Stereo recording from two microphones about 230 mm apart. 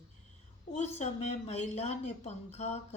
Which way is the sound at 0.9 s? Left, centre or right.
Left.